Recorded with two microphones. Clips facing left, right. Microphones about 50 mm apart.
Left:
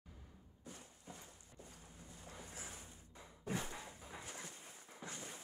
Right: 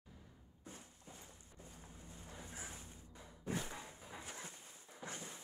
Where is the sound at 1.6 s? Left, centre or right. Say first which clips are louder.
Right 1 dB; right.